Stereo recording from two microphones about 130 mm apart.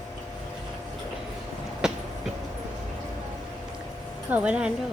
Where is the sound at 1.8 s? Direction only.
5° right (ahead or behind).